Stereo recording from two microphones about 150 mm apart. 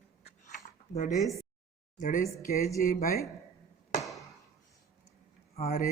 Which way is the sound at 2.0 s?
65° left (ahead or behind).